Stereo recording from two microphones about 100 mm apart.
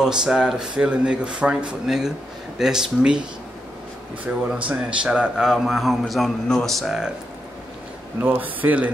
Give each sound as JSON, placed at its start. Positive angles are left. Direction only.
{"t": 0.0, "sound": "speech", "side_deg": -5}
{"t": 4.5, "sound": "a man's voice", "side_deg": -10}
{"t": 8.2, "sound": "speech", "side_deg": -15}